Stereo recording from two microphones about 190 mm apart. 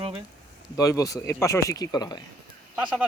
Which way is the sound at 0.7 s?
20° left (ahead or behind).